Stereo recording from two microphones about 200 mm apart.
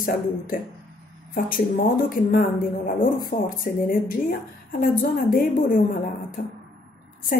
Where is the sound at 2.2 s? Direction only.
45° left (ahead or behind).